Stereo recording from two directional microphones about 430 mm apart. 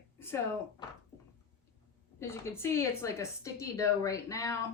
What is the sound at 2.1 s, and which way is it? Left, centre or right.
A woman's voice, centre.